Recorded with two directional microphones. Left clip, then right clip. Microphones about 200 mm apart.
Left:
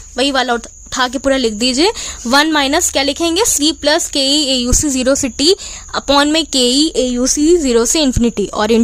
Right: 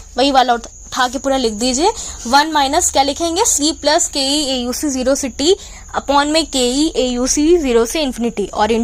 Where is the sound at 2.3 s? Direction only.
60° left (ahead or behind).